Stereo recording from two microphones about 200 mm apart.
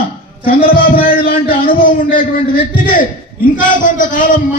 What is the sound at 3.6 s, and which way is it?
Speech, 40° left (ahead or behind).